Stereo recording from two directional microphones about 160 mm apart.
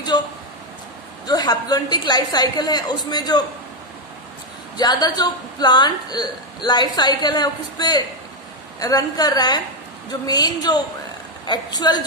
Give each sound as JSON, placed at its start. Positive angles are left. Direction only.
{"t": 0.1, "sound": "a sound", "side_deg": 25}
{"t": 1.2, "sound": "a woman's voice", "side_deg": 25}
{"t": 4.7, "sound": "a woman's voice", "side_deg": 25}